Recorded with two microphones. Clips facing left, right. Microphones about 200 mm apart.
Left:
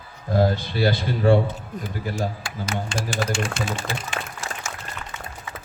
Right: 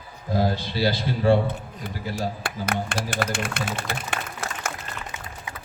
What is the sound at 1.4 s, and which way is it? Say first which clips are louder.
Speech: even; 60° right (ahead or behind).